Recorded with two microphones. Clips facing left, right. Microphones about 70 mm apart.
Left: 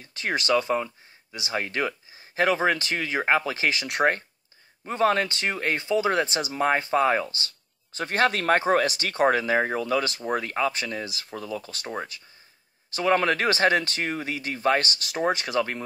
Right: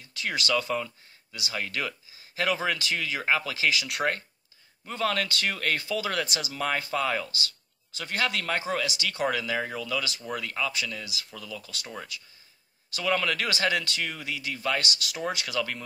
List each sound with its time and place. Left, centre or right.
0.0 s speech: left
6.4 s speech: left
6.8 s speech: left